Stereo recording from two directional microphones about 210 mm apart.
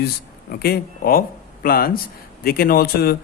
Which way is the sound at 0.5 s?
45° left (ahead or behind).